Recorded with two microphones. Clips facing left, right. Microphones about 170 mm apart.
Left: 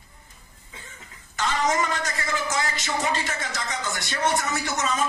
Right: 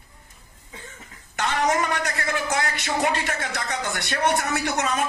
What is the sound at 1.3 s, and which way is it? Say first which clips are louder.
A man's voice: right 1 dB; 60° right (ahead or behind).